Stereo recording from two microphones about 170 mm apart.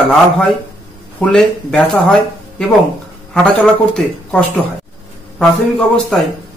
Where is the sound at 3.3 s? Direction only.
5° left (ahead or behind).